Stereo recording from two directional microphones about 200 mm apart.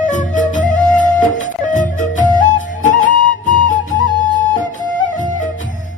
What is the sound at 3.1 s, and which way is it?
Flute, 40° right (ahead or behind).